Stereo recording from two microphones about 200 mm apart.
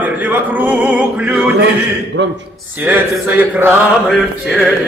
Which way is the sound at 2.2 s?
65° right (ahead or behind).